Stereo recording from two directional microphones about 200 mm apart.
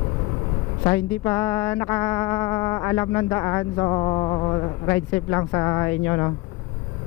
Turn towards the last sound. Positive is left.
turn(degrees=15)  # may be behind; listen again after turning